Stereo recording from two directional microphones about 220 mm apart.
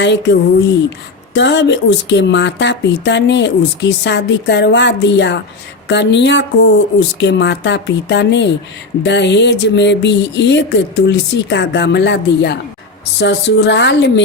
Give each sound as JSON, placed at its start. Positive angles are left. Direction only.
{"t": 0.0, "sound": "speech", "side_deg": 55}